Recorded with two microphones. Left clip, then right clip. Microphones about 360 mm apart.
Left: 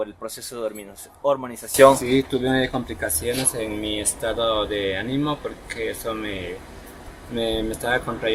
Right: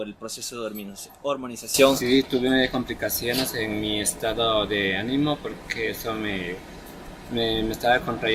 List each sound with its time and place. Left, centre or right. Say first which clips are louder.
0.0 s speech: left 3 dB; left
2.0 s speech: even; centre
7.3 s speech: left 1 dB; centre